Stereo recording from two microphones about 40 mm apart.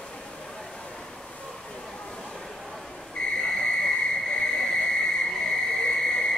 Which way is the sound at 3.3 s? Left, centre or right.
Centre.